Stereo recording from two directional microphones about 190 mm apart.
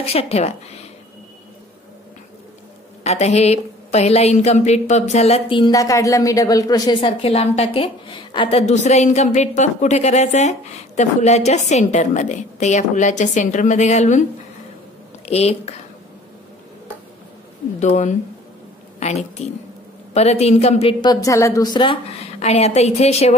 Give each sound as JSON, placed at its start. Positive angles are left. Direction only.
{"t": 0.0, "sound": "a woman's voice", "side_deg": 30}
{"t": 3.0, "sound": "a woman's voice", "side_deg": 35}
{"t": 15.2, "sound": "a woman's voice", "side_deg": 35}
{"t": 17.7, "sound": "a woman's voice", "side_deg": 40}
{"t": 22.4, "sound": "a woman's voice", "side_deg": 35}